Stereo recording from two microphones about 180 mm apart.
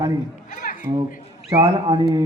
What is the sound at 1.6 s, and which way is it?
Mantra, 25° right (ahead or behind).